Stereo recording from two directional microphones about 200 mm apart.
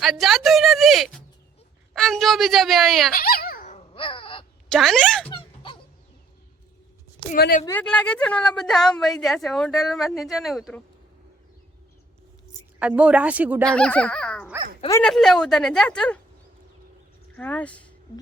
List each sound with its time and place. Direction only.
0.0 s a woman's voice: centre (ahead or behind)
3.1 s dog: 45° left (ahead or behind); by 4.4 s 25° left (ahead or behind)
4.7 s a woman's voice: centre (ahead or behind)
5.3 s music: 25° left (ahead or behind)
7.3 s speech: 50° left (ahead or behind)
7.6 s a woman's voice: 10° left (ahead or behind)
12.8 s speech: 5° right (ahead or behind)
13.7 s a woman's voice: 5° left (ahead or behind)
17.3 s speech: 5° left (ahead or behind)